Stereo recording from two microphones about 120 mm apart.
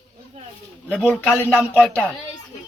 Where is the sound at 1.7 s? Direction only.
10° left (ahead or behind).